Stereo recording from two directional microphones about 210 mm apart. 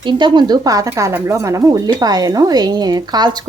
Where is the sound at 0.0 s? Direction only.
20° right (ahead or behind).